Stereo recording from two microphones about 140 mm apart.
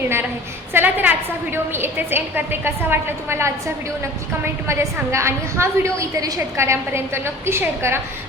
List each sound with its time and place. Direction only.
0.7 s a woman's voice: 15° right (ahead or behind)